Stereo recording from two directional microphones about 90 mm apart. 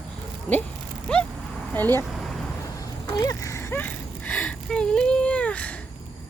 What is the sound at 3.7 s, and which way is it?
Speech, 20° left (ahead or behind).